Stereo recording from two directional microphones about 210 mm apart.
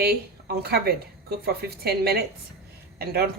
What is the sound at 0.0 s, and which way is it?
A woman's voice, 50° right (ahead or behind).